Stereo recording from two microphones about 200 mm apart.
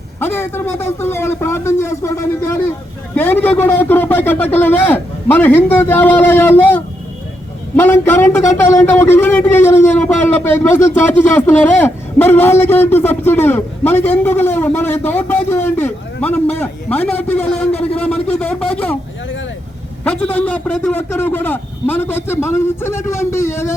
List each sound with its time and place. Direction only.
0.2 s a man's voice: 10° left (ahead or behind)
8.6 s speech: 35° left (ahead or behind)
8.9 s a man's voice: 10° left (ahead or behind)
17.3 s speech: 30° left (ahead or behind)
17.9 s a man's voice: 5° left (ahead or behind)
20.1 s a man's voice: 5° left (ahead or behind)